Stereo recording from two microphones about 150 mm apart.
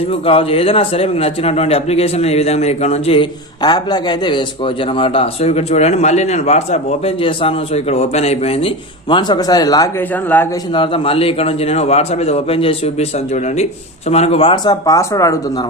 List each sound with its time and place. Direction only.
0.1 s a man's voice: 40° left (ahead or behind)
10.0 s a man's voice: 10° left (ahead or behind)
10.7 s a man's voice: 35° left (ahead or behind)